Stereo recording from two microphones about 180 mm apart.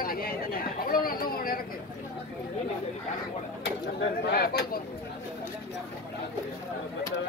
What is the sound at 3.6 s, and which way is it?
Speech, 65° left (ahead or behind).